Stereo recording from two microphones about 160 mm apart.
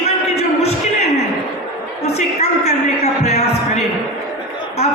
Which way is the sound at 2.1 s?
45° left (ahead or behind).